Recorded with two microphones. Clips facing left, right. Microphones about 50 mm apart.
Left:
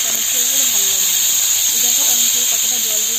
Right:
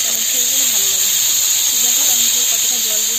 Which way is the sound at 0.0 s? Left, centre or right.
Left.